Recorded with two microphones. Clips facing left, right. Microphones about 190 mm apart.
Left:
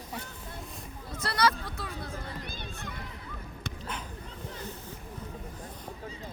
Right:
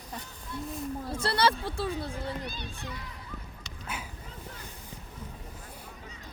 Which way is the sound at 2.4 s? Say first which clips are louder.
Right 2 dB; 50° left (ahead or behind).